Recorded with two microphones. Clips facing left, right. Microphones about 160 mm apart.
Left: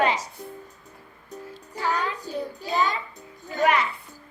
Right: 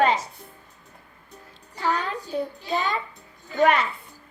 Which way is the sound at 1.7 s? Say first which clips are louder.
Right 1 dB; 45° left (ahead or behind).